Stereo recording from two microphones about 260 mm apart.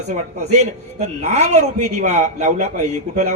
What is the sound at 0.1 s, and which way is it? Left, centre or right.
Speech, right.